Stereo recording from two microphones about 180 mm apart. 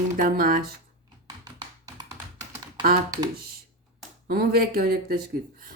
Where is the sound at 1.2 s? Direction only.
20° right (ahead or behind).